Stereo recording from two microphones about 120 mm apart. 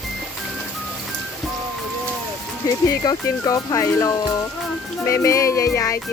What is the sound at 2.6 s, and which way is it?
Speech, 30° left (ahead or behind).